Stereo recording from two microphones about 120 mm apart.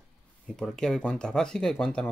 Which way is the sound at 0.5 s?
5° left (ahead or behind).